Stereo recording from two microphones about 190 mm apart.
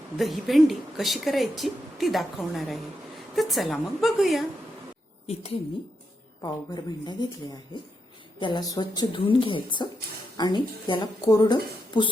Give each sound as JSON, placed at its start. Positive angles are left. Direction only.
{"t": 0.2, "sound": "speech", "side_deg": 0}
{"t": 6.4, "sound": "a woman's voice", "side_deg": 20}
{"t": 8.4, "sound": "a woman's voice", "side_deg": 25}